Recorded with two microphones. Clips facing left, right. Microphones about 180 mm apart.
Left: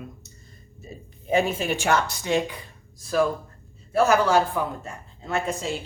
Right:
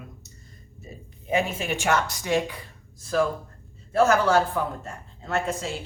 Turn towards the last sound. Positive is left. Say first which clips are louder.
# left 1 dB
turn(degrees=15)  # may be behind; listen again after turning